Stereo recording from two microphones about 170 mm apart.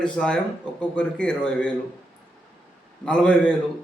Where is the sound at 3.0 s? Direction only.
5° left (ahead or behind).